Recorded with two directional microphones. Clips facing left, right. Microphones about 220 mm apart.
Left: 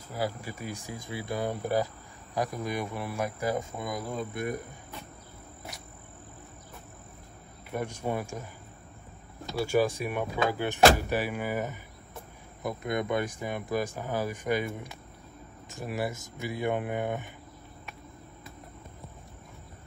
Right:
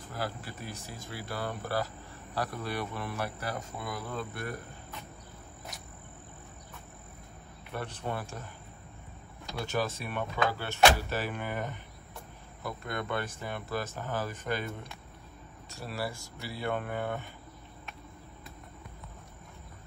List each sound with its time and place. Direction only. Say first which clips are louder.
0.1 s speech: left 5 dB; 10° left (ahead or behind)
7.7 s speech: left 5 dB; 10° left (ahead or behind)
9.5 s speech: left 7 dB; 10° left (ahead or behind)